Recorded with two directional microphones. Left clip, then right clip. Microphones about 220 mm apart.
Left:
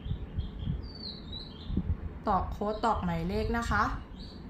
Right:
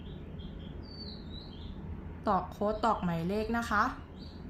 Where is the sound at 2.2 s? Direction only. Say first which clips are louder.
Even; 5° right (ahead or behind).